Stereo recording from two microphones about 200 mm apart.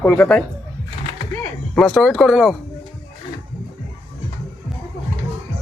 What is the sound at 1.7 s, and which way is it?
Speech, centre (ahead or behind).